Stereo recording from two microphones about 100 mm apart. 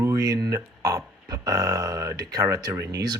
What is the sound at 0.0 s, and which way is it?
Speech, 35° right (ahead or behind).